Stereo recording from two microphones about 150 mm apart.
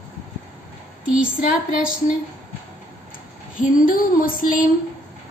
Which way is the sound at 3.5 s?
65° left (ahead or behind).